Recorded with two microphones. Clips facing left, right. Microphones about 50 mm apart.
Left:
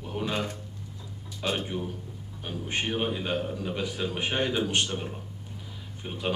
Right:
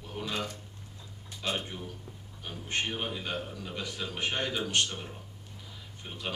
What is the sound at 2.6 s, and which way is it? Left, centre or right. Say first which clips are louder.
A man's voice: left 4 dB; centre.